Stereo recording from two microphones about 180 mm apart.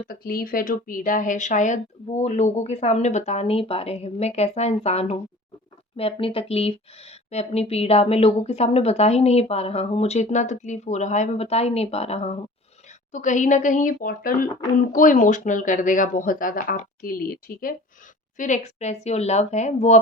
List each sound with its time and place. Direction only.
0.1 s speech: 55° left (ahead or behind)
18.3 s speech: 40° left (ahead or behind)